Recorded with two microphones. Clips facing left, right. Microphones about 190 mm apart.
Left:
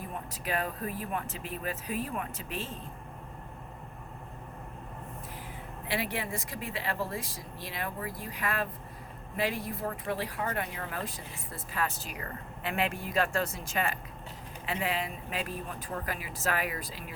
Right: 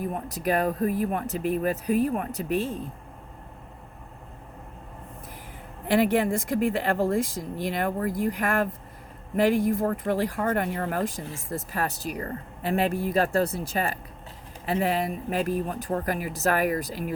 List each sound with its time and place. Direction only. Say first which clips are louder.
0.1 s speech: right 5 dB; 40° right (ahead or behind)
5.9 s speech: right 12 dB; 50° right (ahead or behind)